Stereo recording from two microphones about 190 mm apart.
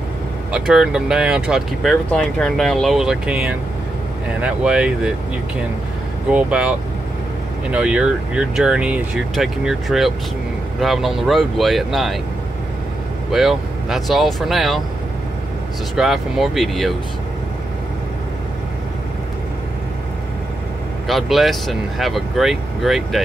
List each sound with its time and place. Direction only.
0.5 s speech: centre (ahead or behind)
6.3 s speech: 5° right (ahead or behind)
7.7 s speech: 5° right (ahead or behind)
13.3 s speech: centre (ahead or behind)
16.0 s speech: centre (ahead or behind)
21.1 s speech: centre (ahead or behind)